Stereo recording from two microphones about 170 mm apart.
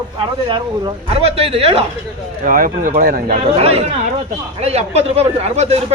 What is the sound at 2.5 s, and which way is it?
Speech, 55° right (ahead or behind).